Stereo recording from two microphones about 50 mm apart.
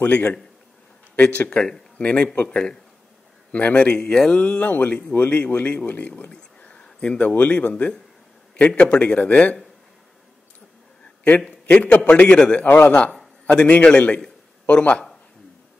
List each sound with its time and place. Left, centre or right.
0.1 s speech: left
4.3 s a man's voice: left
11.6 s a man's voice: left
12.6 s a man's voice: left
13.5 s speech: left